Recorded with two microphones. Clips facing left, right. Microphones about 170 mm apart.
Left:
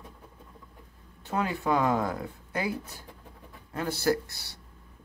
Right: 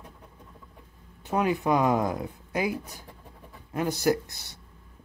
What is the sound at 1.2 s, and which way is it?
Speech, 15° right (ahead or behind).